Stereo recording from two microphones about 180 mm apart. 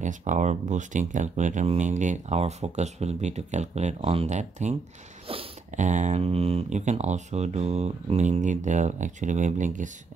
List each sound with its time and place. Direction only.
0.0 s speech: 45° right (ahead or behind)